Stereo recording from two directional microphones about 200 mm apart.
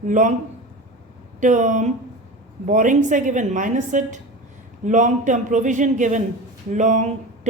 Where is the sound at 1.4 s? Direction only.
40° right (ahead or behind).